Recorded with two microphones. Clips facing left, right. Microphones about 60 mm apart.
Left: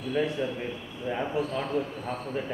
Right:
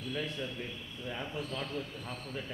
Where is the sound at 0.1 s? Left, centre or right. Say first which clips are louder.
Left 11 dB; left.